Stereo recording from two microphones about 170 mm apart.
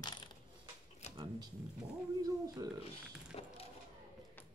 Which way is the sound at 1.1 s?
25° right (ahead or behind).